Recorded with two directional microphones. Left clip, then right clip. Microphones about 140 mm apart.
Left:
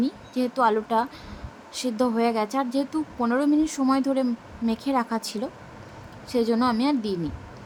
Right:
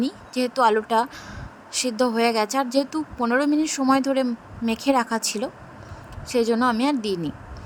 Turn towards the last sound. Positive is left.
turn(degrees=-45)  # may be behind; listen again after turning